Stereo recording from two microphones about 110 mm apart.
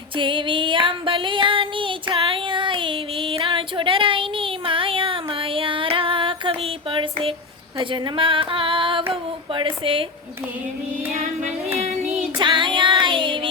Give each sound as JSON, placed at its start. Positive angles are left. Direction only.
{"t": 0.2, "sound": "music", "side_deg": -50}
{"t": 7.8, "sound": "a sound", "side_deg": -50}
{"t": 11.1, "sound": "child singing", "side_deg": -90}
{"t": 12.4, "sound": "child singing", "side_deg": -45}